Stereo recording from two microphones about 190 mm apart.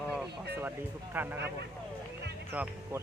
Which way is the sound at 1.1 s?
10° right (ahead or behind).